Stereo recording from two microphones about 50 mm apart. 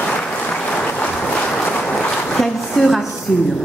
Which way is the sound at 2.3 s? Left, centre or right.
Centre.